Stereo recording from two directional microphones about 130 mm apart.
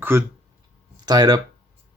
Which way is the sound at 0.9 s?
30° right (ahead or behind).